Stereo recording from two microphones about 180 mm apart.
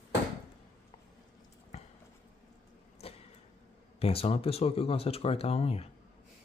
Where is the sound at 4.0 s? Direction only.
35° left (ahead or behind).